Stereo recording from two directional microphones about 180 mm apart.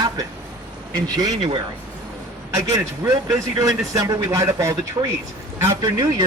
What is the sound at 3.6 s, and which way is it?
Speech, 20° right (ahead or behind).